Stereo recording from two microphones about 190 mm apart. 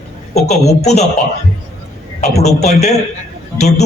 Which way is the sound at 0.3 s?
35° left (ahead or behind).